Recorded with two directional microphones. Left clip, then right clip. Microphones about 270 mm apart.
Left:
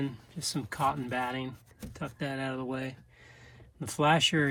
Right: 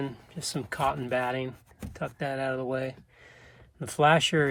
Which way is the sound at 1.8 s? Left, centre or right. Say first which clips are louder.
Right 4 dB; centre.